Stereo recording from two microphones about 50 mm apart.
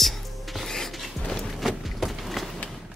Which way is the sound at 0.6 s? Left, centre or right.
Centre.